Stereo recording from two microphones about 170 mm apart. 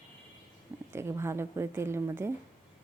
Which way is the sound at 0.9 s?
15° right (ahead or behind).